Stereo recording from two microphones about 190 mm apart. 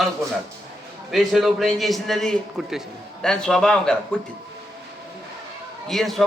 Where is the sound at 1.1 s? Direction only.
Centre (ahead or behind).